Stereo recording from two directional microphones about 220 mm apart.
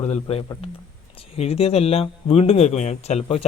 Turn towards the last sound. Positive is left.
turn(degrees=30)  # may be behind; listen again after turning